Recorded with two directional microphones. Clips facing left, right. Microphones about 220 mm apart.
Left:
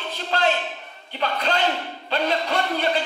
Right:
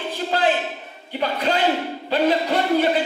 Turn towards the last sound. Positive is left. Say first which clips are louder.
# right 5 dB
turn(degrees=-10)  # may be behind; listen again after turning